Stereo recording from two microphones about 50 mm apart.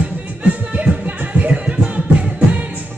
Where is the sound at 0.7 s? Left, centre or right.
Right.